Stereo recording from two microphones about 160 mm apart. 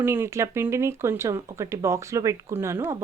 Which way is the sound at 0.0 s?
15° right (ahead or behind).